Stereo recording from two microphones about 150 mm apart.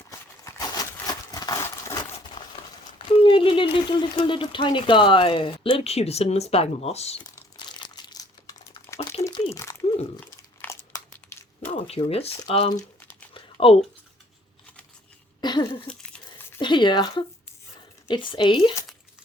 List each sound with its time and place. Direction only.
0.7 s a sound: 25° left (ahead or behind)
3.1 s speech: 35° left (ahead or behind)
7.5 s crumpling: 30° left (ahead or behind)
9.2 s crumpling: 40° left (ahead or behind)
10.2 s crunch: 10° left (ahead or behind)
10.9 s crumpling: 20° left (ahead or behind)
11.7 s speech: 40° left (ahead or behind)
13.3 s a sound: 40° left (ahead or behind)
15.4 s a sound: 30° left (ahead or behind)
16.6 s speech: 30° left (ahead or behind)